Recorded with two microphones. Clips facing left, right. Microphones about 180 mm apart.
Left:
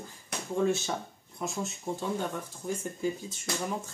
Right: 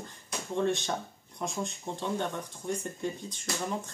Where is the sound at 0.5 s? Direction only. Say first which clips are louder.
Left 1 dB; 5° left (ahead or behind).